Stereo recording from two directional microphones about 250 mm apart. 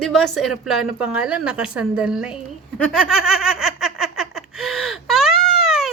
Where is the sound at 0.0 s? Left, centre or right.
Centre.